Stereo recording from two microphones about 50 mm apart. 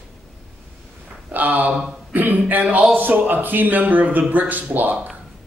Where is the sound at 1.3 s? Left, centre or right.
Right.